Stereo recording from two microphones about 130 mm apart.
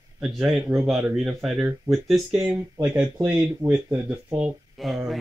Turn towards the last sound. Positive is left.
turn(degrees=-5)  # may be behind; listen again after turning